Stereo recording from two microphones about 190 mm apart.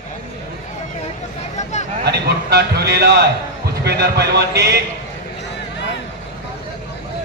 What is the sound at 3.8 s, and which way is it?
Speech, 60° right (ahead or behind).